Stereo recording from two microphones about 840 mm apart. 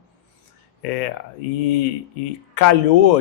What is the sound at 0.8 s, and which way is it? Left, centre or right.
Speech, left.